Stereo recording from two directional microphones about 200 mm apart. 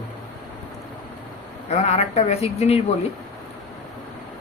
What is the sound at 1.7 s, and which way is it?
Speech, 35° left (ahead or behind).